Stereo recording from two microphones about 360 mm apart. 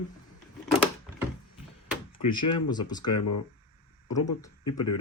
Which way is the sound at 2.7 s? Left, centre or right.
Centre.